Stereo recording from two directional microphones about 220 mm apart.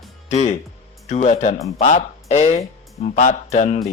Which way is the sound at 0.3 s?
30° left (ahead or behind).